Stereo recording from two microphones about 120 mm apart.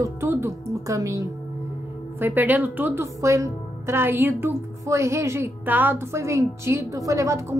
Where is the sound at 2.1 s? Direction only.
15° right (ahead or behind).